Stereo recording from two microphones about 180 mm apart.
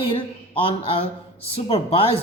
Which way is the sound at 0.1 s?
30° left (ahead or behind).